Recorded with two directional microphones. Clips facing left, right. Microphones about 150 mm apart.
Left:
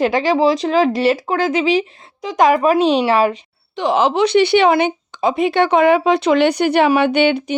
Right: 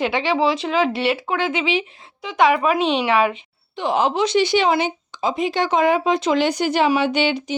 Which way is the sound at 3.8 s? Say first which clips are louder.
Left 4 dB; 90° left.